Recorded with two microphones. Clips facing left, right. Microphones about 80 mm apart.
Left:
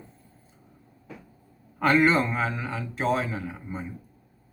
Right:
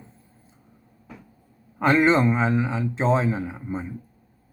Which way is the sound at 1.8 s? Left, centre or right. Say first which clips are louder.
Right 3 dB; centre.